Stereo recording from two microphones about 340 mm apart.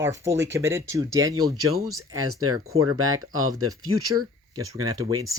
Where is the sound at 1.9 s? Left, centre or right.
Right.